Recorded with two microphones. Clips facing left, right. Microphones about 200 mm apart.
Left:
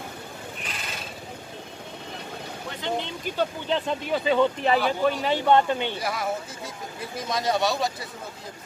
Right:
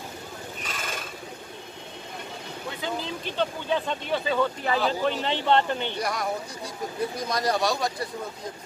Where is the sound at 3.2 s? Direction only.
10° left (ahead or behind).